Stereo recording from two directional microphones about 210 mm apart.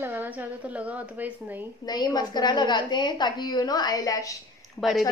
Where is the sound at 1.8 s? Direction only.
20° left (ahead or behind).